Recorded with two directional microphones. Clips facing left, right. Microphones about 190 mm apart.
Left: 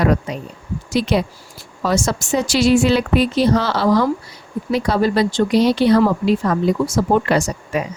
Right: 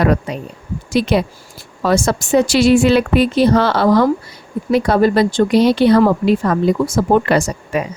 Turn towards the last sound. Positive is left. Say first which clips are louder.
# right 2 dB
turn(degrees=-60)  # may be behind; listen again after turning